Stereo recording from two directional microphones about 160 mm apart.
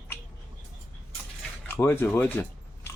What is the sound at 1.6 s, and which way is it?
Speech, 15° left (ahead or behind).